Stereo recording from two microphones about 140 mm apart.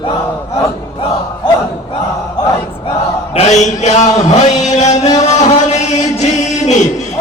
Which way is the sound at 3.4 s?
55° left (ahead or behind).